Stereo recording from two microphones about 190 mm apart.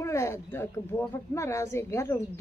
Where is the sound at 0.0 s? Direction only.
15° left (ahead or behind).